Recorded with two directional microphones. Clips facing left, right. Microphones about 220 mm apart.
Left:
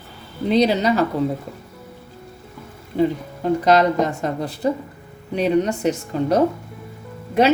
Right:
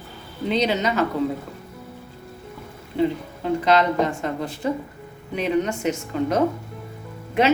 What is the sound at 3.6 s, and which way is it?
A woman's voice, 40° left (ahead or behind).